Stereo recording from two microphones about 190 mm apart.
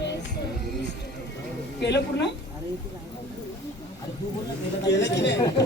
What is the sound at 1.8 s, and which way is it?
Speech, 65° left (ahead or behind).